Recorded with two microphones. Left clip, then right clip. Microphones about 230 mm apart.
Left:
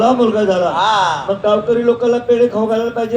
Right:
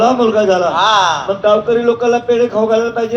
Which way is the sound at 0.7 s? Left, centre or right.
Right.